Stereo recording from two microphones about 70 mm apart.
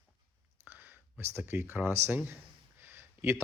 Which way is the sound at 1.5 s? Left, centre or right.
Right.